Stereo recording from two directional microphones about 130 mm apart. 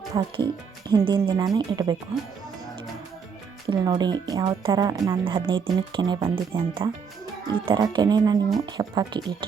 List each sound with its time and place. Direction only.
0.1 s speech: 35° right (ahead or behind)
3.7 s speech: 35° right (ahead or behind)
5.2 s speech: 40° right (ahead or behind)